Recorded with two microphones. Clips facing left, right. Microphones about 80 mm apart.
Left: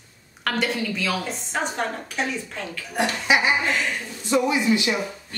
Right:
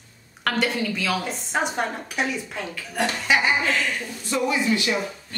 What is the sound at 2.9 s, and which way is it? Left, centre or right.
A man's voice, centre.